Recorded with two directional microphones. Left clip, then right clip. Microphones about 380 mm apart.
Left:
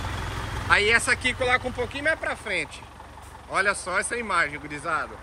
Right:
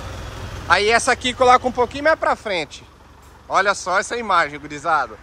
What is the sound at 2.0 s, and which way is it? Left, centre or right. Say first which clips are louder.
Speech: right 8 dB; right.